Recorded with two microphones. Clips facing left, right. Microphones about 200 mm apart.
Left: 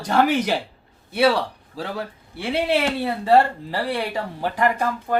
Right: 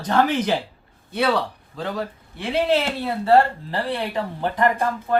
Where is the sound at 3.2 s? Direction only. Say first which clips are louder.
Right 1 dB; 15° left (ahead or behind).